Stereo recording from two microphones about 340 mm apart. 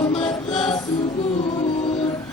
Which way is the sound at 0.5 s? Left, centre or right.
Centre.